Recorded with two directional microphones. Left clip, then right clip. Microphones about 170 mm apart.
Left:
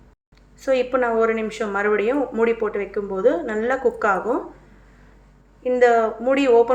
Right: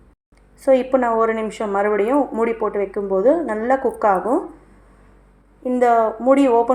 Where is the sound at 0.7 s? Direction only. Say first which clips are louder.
Right 4 dB; 30° right (ahead or behind).